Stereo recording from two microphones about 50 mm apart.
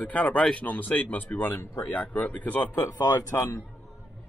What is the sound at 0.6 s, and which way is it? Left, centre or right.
Speech, left.